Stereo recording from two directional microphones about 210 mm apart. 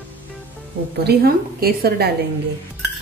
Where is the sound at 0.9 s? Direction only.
50° right (ahead or behind).